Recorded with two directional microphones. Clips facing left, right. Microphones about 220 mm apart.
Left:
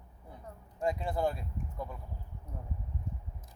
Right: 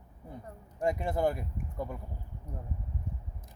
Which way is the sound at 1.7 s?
50° right (ahead or behind).